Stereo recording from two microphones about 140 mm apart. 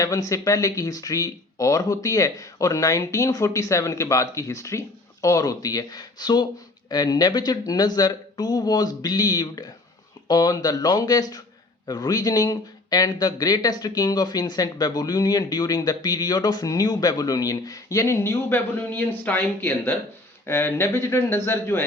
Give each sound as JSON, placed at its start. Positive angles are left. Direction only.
{"t": 0.0, "sound": "speech", "side_deg": 25}